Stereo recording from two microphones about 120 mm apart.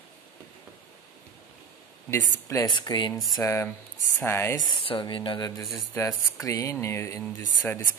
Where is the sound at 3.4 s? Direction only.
20° left (ahead or behind).